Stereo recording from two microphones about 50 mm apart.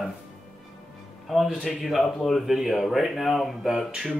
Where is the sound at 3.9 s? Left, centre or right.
Centre.